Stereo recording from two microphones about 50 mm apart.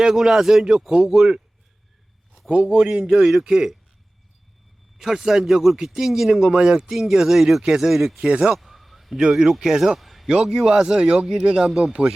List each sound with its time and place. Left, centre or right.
0.0 s speech: centre
2.5 s speech: centre
4.9 s speech: centre
8.2 s speech: right
8.5 s a sound: centre
9.3 s speech: centre
10.0 s a sound: centre
10.2 s speech: centre